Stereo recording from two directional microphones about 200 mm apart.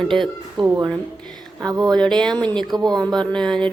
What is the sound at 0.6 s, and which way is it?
A woman's voice, 15° right (ahead or behind).